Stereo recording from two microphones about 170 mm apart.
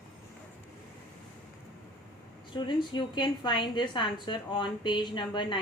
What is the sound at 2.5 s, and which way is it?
A woman's voice, 30° left (ahead or behind).